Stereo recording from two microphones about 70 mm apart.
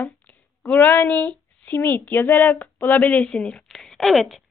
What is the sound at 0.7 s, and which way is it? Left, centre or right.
Speech, left.